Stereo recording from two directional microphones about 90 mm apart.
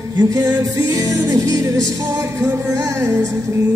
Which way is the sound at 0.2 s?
40° right (ahead or behind).